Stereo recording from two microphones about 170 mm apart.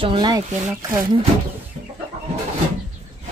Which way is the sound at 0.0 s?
30° right (ahead or behind).